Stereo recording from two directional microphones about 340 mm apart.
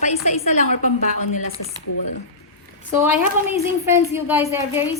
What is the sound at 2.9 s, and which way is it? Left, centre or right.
A woman's voice, centre.